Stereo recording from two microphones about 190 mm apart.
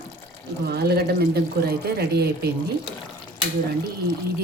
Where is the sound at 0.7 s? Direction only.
55° right (ahead or behind).